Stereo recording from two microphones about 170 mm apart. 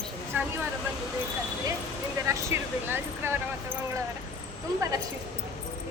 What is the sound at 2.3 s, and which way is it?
Speech, 15° right (ahead or behind).